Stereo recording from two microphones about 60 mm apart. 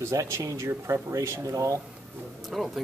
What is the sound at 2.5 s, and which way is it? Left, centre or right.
Speech, centre.